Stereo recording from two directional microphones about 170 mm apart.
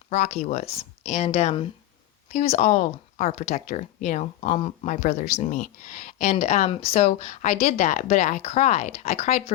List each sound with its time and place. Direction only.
0.1 s speech: 40° left (ahead or behind)